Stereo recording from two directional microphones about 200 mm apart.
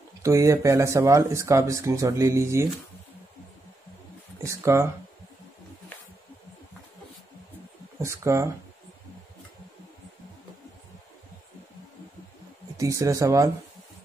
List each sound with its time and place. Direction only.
0.2 s speech: 15° right (ahead or behind)
4.4 s speech: 15° right (ahead or behind)
8.0 s speech: 15° right (ahead or behind)
12.7 s speech: 15° right (ahead or behind)